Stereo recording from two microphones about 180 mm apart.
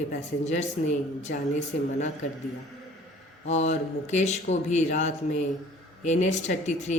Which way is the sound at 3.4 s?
40° left (ahead or behind).